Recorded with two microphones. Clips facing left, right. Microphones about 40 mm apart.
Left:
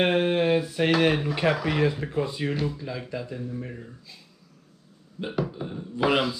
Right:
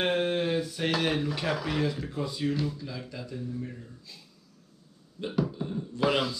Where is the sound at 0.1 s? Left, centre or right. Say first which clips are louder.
Left 5 dB; left.